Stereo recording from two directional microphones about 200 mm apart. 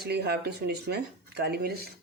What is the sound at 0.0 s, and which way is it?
Speech, 50° right (ahead or behind).